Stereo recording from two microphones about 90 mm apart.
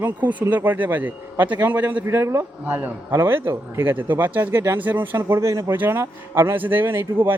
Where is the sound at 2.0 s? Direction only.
35° right (ahead or behind).